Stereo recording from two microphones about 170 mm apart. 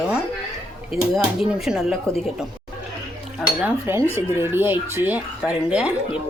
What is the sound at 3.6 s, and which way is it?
Speech, 15° right (ahead or behind).